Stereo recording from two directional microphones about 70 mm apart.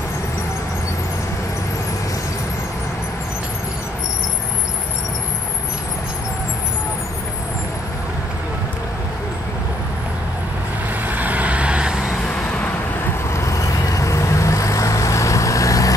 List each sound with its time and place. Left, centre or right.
11.1 s vehicle: right
12.4 s vehicle: left
13.4 s vehicle: left